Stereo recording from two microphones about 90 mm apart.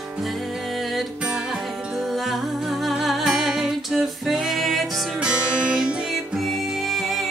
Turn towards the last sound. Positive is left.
turn(degrees=0)  # may be behind; listen again after turning